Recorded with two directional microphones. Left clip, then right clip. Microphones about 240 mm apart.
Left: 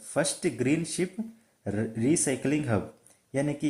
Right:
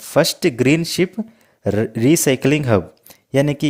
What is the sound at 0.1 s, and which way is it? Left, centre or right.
Speech, right.